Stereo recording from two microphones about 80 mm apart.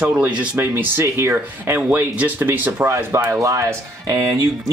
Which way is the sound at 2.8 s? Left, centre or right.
Right.